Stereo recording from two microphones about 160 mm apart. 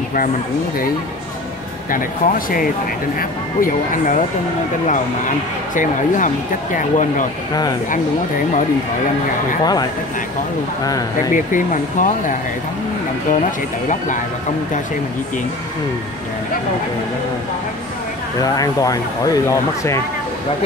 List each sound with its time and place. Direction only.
1.9 s speech: 60° left (ahead or behind)
5.8 s speech: 55° left (ahead or behind)
9.6 s speech: 25° left (ahead or behind)
11.3 s speech: 55° left (ahead or behind)
18.4 s speech: 20° left (ahead or behind)